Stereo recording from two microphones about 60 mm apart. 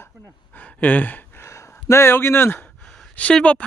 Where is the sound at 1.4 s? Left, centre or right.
Left.